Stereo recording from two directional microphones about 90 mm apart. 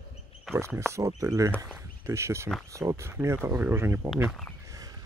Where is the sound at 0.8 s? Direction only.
35° right (ahead or behind).